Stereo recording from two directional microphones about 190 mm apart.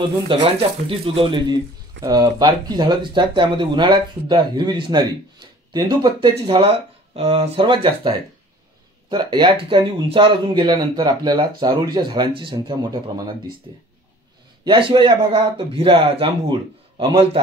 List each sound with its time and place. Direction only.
0.3 s speech: 30° right (ahead or behind)
9.1 s speech: 25° right (ahead or behind)